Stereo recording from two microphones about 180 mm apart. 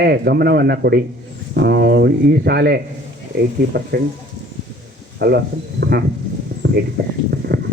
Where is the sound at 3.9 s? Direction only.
60° right (ahead or behind).